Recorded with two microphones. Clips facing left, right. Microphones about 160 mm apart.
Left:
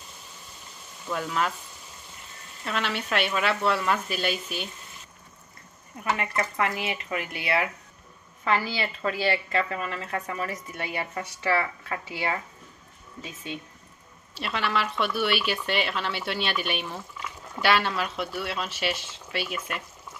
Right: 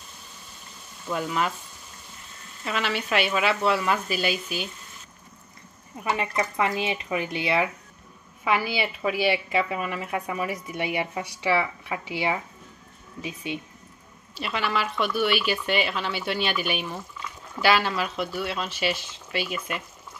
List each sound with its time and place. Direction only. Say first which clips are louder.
1.0 s speech: right 1 dB; 5° right (ahead or behind)
2.6 s speech: right 2 dB; centre (ahead or behind)
5.9 s a woman's voice: right 2 dB; 15° right (ahead or behind)
14.4 s speech: right 1 dB; centre (ahead or behind)